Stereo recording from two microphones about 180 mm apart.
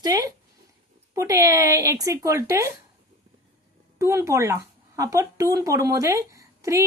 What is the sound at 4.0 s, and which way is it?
A woman's voice, 15° right (ahead or behind).